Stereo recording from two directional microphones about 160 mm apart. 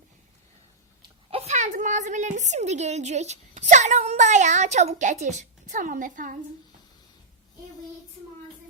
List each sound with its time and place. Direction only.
1.3 s a woman's voice: 40° right (ahead or behind)